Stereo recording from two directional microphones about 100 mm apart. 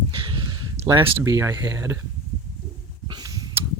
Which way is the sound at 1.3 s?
35° right (ahead or behind).